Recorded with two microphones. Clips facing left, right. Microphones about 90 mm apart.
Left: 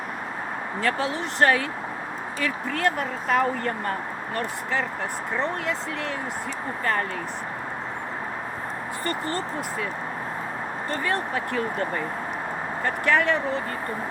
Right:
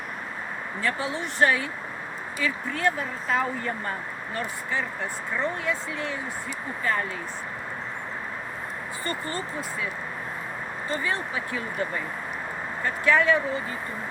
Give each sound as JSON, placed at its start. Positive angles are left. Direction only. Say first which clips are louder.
{"t": 0.8, "sound": "speech", "louder": "left 3 dB", "side_deg": 70}
{"t": 10.8, "sound": "speech", "louder": "left 2 dB", "side_deg": 60}